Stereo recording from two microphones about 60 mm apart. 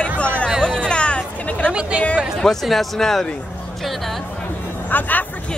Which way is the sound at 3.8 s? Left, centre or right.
Centre.